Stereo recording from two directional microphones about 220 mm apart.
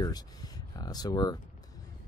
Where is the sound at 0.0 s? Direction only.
15° left (ahead or behind).